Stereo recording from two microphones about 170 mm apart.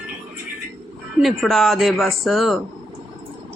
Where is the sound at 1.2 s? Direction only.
Centre (ahead or behind).